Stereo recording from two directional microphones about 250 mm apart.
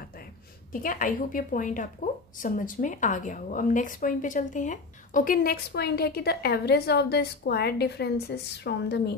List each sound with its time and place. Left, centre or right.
0.8 s speech: left